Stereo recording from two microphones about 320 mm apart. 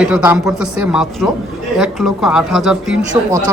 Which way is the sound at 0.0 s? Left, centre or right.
Centre.